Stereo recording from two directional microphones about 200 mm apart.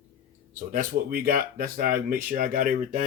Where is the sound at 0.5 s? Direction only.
45° right (ahead or behind).